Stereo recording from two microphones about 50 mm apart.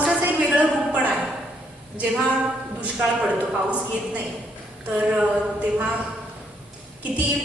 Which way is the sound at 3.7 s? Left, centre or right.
Right.